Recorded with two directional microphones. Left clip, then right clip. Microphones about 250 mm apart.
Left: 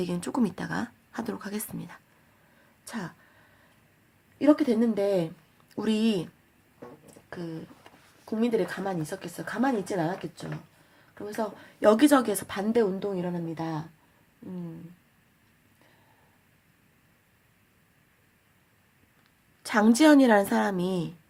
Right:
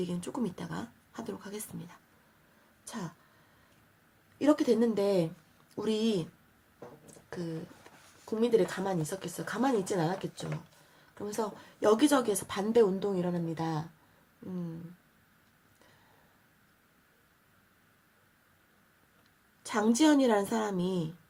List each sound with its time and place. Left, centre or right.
0.0 s speech: left
4.4 s a woman's voice: centre
8.2 s a woman's voice: centre
11.9 s a woman's voice: centre
19.6 s speech: left